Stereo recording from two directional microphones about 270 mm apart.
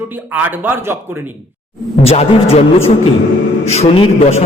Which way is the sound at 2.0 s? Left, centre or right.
Left.